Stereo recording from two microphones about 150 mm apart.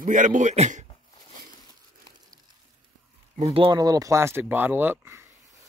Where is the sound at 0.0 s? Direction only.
60° right (ahead or behind).